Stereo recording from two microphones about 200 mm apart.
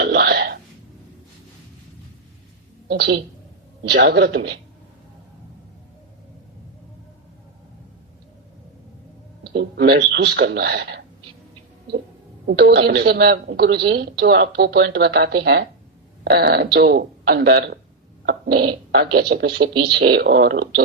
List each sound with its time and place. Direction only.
0.0 s a sound: 55° right (ahead or behind)
2.9 s a man's voice: 55° right (ahead or behind)
9.4 s a woman's voice: 55° right (ahead or behind)
12.5 s a woman's voice: 55° right (ahead or behind)
18.3 s fart: 50° right (ahead or behind)
18.7 s a woman's voice: 55° right (ahead or behind)